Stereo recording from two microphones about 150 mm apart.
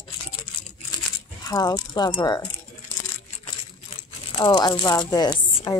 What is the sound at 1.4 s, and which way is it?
Speech, 25° left (ahead or behind).